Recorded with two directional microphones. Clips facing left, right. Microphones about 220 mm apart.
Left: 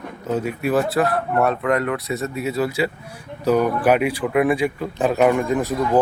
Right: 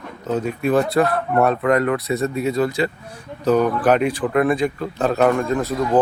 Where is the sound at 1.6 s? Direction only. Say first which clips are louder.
Right 3 dB; 40° right (ahead or behind).